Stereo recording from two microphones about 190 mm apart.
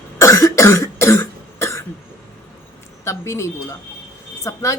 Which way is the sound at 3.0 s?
15° left (ahead or behind).